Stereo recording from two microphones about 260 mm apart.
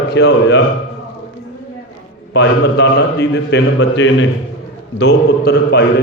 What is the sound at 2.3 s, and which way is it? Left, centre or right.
A man's voice, left.